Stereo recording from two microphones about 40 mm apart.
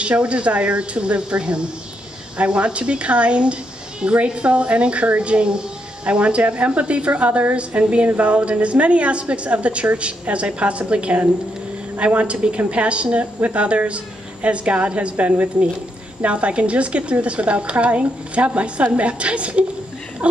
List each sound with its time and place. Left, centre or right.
0.0 s a woman's voice: right